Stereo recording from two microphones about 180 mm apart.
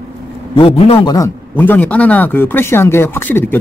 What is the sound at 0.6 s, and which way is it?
Speech, 30° left (ahead or behind).